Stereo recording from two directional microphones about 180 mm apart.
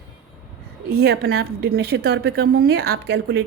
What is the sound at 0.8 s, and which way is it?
A woman's voice, 60° right (ahead or behind).